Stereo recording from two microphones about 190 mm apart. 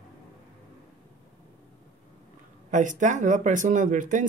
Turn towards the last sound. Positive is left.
turn(degrees=-40)  # may be behind; listen again after turning